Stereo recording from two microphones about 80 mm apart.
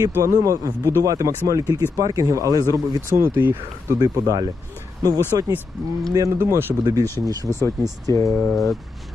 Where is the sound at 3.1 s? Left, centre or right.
Right.